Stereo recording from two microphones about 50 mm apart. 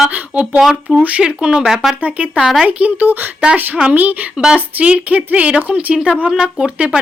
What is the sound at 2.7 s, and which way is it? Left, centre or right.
Speech, right.